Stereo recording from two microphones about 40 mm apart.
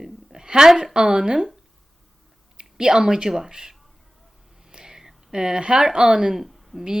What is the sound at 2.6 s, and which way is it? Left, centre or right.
Speech, centre.